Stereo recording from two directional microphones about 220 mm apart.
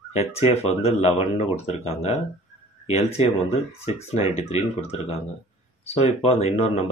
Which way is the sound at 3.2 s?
30° left (ahead or behind).